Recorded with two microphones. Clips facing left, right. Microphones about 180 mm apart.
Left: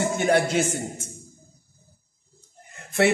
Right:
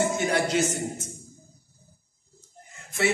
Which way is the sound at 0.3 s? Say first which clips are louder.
Left 3 dB; 55° left (ahead or behind).